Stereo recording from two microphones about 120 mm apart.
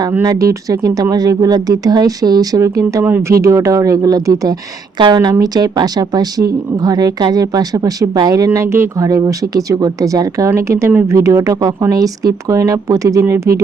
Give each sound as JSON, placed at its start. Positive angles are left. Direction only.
{"t": 0.1, "sound": "speech", "side_deg": -25}
{"t": 8.4, "sound": "speech", "side_deg": -20}